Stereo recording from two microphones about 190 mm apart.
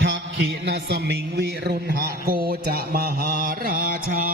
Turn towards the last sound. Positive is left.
turn(degrees=-50)  # may be behind; listen again after turning